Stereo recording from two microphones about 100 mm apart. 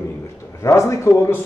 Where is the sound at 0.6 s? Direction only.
30° left (ahead or behind).